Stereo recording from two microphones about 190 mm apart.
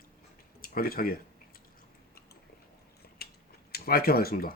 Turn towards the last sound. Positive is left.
turn(degrees=50)  # may be behind; listen again after turning